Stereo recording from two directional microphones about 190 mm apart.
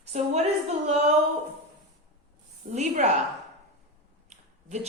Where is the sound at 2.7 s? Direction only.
35° right (ahead or behind).